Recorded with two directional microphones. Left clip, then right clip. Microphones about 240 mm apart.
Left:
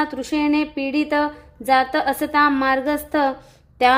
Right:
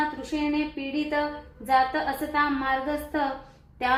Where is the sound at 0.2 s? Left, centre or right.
Left.